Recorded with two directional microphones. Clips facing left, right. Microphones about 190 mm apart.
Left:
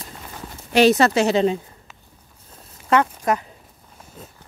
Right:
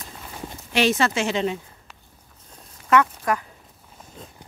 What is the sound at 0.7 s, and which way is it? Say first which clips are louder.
Speech: left 6 dB; 40° left (ahead or behind).